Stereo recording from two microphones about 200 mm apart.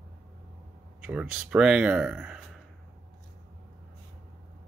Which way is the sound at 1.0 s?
5° right (ahead or behind).